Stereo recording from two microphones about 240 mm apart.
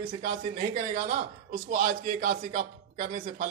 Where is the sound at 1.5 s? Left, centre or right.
Right.